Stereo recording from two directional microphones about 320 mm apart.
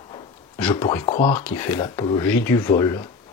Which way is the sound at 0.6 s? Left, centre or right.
Centre.